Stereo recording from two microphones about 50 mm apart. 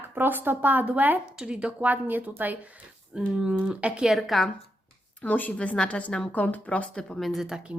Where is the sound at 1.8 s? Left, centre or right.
Right.